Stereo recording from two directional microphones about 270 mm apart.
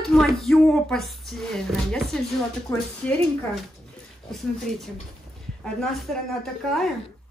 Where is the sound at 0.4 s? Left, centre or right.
Centre.